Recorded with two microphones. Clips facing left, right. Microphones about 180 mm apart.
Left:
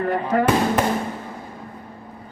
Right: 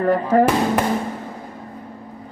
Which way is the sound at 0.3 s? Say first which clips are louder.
Right 5 dB; 45° right (ahead or behind).